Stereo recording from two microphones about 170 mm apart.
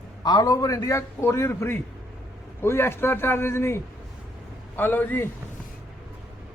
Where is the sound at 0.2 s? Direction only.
25° left (ahead or behind).